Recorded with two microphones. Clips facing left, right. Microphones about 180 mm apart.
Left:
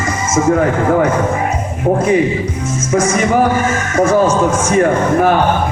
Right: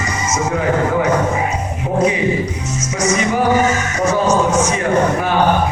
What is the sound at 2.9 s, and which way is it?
Speech, 50° left (ahead or behind).